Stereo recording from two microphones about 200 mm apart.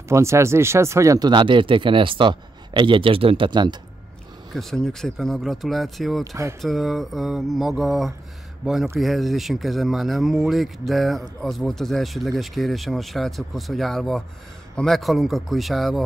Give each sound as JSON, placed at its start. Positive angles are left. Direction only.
{"t": 0.1, "sound": "speech", "side_deg": -15}
{"t": 4.6, "sound": "speech", "side_deg": 0}
{"t": 6.2, "sound": "speech", "side_deg": -15}
{"t": 6.6, "sound": "speech", "side_deg": 0}